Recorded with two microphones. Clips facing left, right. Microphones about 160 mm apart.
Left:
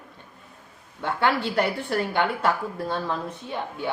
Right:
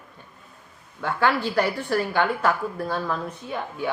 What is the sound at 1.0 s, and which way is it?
Speech, 25° left (ahead or behind).